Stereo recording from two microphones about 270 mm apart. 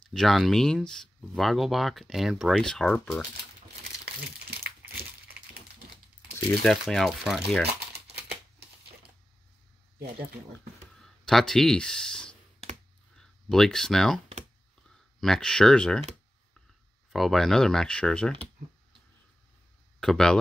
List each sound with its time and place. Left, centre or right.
0.1 s speech: centre
4.0 s crumpling: right
6.6 s speech: centre
11.0 s speech: centre
17.1 s speech: centre
20.0 s speech: centre